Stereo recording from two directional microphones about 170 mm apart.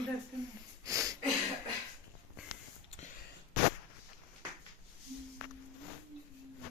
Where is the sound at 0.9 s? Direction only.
20° right (ahead or behind).